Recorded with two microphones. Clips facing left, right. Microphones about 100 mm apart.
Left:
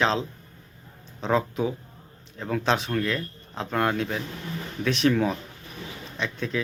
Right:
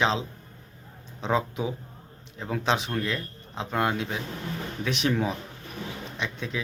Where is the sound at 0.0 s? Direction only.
15° right (ahead or behind).